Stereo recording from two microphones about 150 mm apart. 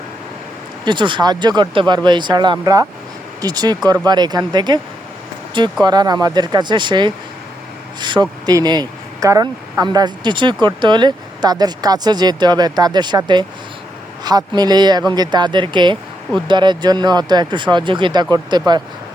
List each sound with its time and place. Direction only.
0.9 s speech: 30° right (ahead or behind)
5.8 s speech: 25° right (ahead or behind)